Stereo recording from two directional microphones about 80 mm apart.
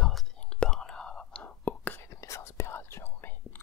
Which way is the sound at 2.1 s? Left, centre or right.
Left.